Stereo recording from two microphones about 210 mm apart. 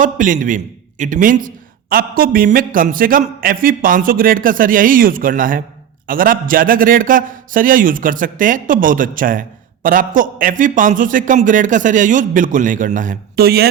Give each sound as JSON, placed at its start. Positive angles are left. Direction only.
{"t": 0.0, "sound": "a man's voice", "side_deg": -40}